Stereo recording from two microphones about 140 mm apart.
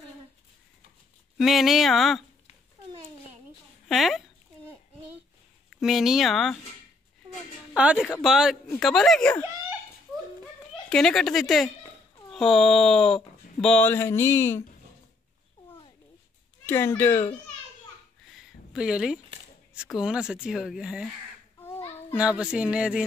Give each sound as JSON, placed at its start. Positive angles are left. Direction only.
{"t": 1.4, "sound": "speech", "side_deg": 0}
{"t": 3.9, "sound": "speech", "side_deg": 0}
{"t": 5.8, "sound": "speech", "side_deg": 0}
{"t": 7.7, "sound": "speech", "side_deg": -10}
{"t": 10.9, "sound": "speech", "side_deg": 5}
{"t": 16.6, "sound": "a child's voice", "side_deg": 15}
{"t": 18.7, "sound": "a woman's voice", "side_deg": -5}
{"t": 21.5, "sound": "a sound", "side_deg": 15}
{"t": 22.1, "sound": "speech", "side_deg": -5}